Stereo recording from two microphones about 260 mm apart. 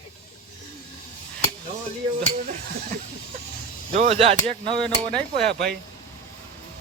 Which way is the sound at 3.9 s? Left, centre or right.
Right.